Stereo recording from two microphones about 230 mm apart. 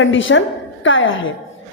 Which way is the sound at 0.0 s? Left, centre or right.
Left.